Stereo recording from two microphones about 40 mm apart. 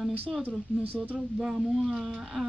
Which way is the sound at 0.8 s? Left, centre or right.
Right.